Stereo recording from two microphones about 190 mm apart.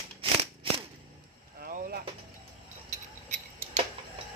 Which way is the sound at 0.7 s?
30° right (ahead or behind).